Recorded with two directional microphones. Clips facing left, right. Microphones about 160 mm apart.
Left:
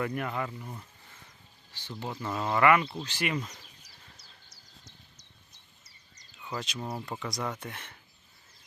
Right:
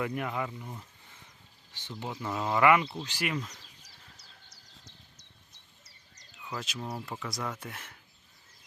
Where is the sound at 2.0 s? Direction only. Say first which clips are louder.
Left 1 dB; 15° right (ahead or behind).